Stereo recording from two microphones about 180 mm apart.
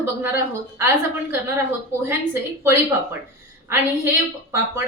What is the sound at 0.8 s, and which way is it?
A woman's voice, 15° right (ahead or behind).